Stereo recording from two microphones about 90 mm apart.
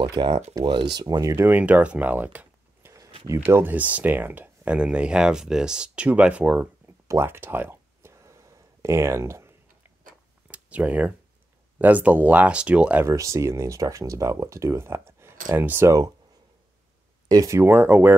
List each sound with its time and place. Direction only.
0.0 s speech: 55° right (ahead or behind)
1.3 s speech: 20° right (ahead or behind)
7.1 s a sound: 25° right (ahead or behind)
10.5 s speech: 15° right (ahead or behind)
13.0 s speech: 35° right (ahead or behind)
17.3 s speech: 35° right (ahead or behind); by 18.1 s 20° right (ahead or behind)